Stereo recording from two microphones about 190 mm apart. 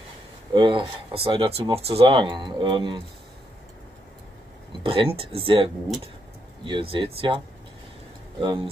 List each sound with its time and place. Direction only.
0.5 s speech: 25° right (ahead or behind)
4.8 s speech: 30° right (ahead or behind)